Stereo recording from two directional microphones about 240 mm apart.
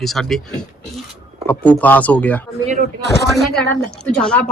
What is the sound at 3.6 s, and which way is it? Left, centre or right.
Speech, centre.